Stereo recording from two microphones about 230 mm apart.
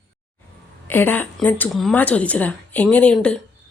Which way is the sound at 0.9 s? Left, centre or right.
Centre.